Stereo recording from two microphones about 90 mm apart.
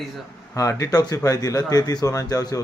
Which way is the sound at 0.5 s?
35° left (ahead or behind).